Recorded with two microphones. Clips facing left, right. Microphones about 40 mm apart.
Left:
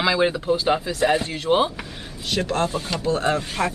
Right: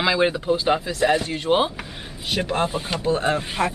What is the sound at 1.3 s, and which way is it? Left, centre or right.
Speech, centre.